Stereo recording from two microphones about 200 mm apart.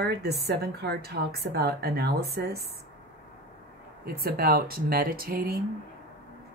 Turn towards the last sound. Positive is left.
turn(degrees=-50)  # may be behind; listen again after turning